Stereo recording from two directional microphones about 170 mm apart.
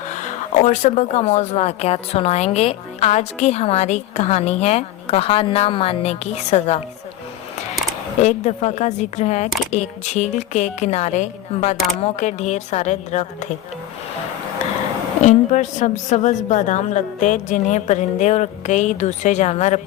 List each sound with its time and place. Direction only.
0.1 s speech: 50° left (ahead or behind)
8.2 s a woman's voice: 40° left (ahead or behind)
15.2 s a woman's voice: 45° left (ahead or behind)